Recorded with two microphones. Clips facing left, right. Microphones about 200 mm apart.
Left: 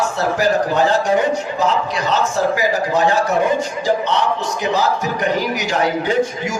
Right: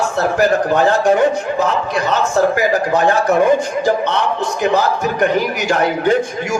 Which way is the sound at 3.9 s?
55° right (ahead or behind).